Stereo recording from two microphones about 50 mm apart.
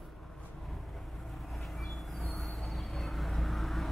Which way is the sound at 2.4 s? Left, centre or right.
Centre.